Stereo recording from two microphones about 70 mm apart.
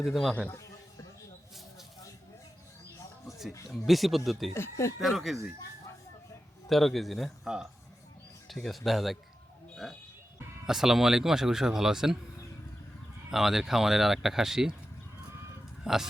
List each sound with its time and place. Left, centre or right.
0.0 s speech: centre
3.2 s a sound: centre
3.7 s speech: centre
4.5 s speech: left
4.9 s speech: centre
6.7 s speech: centre
13.3 s speech: centre
15.8 s speech: centre